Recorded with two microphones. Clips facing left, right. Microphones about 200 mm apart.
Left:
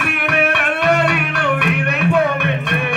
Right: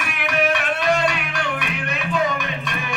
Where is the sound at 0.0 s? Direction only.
60° left (ahead or behind).